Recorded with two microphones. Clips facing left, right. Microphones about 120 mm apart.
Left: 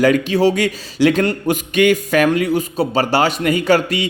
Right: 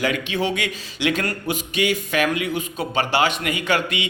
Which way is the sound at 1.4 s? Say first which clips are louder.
Left 8 dB; 50° left (ahead or behind).